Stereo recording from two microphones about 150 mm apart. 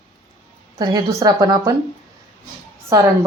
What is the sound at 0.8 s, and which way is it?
Speech, 25° right (ahead or behind).